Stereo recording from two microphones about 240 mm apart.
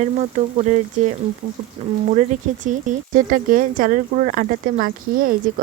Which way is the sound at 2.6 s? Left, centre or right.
Right.